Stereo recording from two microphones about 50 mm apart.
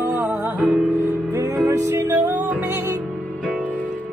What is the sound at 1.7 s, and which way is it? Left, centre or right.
Music, right.